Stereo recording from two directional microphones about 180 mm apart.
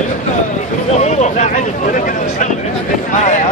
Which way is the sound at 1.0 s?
40° left (ahead or behind).